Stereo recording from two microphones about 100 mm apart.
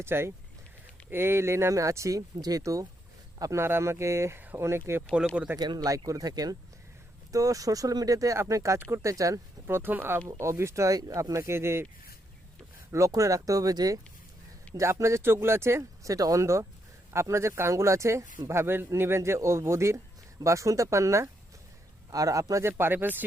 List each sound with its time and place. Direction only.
0.0 s speech: 25° right (ahead or behind)
5.5 s speech: 45° right (ahead or behind)
9.6 s speech: 20° right (ahead or behind)
12.9 s speech: 30° right (ahead or behind)
22.8 s speech: 20° right (ahead or behind)